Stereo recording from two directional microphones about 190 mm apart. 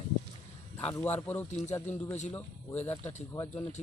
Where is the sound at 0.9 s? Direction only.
10° left (ahead or behind).